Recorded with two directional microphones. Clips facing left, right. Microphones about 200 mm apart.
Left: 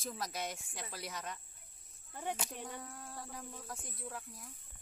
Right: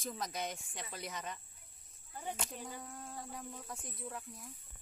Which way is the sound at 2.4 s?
Centre (ahead or behind).